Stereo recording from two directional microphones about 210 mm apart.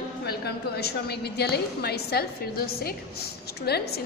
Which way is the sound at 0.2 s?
50° left (ahead or behind).